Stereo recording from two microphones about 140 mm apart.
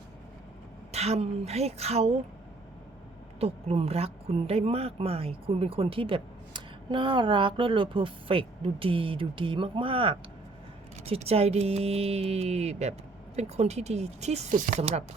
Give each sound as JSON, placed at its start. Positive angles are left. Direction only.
{"t": 0.9, "sound": "speech", "side_deg": -50}
{"t": 3.4, "sound": "speech", "side_deg": -45}